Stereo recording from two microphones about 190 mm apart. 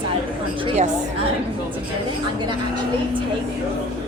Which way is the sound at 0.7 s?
25° right (ahead or behind).